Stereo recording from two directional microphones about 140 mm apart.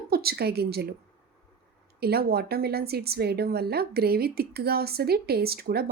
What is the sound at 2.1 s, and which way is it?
Speech, 90° right.